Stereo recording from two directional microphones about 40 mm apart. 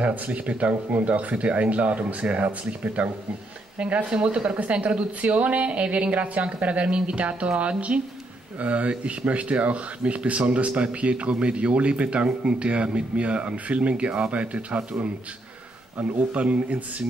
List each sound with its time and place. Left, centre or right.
0.0 s speech: right
16.0 s speech: right